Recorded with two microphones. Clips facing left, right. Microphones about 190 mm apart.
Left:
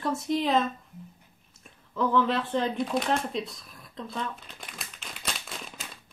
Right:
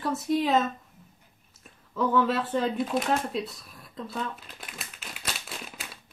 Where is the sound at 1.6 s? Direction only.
5° right (ahead or behind).